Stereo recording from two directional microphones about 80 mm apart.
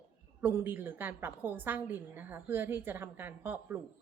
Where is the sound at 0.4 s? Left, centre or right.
Right.